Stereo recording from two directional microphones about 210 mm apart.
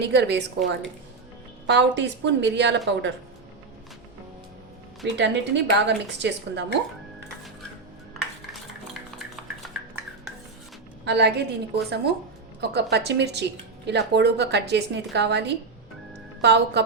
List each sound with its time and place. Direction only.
0.0 s a woman's voice: 55° right (ahead or behind)
5.1 s a woman's voice: 55° right (ahead or behind)
8.9 s stir: centre (ahead or behind)
11.0 s a woman's voice: 55° right (ahead or behind)